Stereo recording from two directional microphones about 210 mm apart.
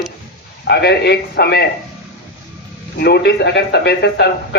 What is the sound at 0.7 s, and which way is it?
Speech, 50° left (ahead or behind).